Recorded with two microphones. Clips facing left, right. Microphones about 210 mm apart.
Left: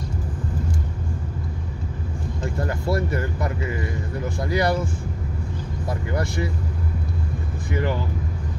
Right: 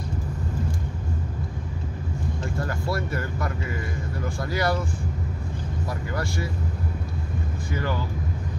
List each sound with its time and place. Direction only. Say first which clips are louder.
2.6 s speech: left 5 dB; 20° left (ahead or behind)
6.1 s speech: left 4 dB; 20° left (ahead or behind)
7.7 s speech: left 4 dB; 20° left (ahead or behind)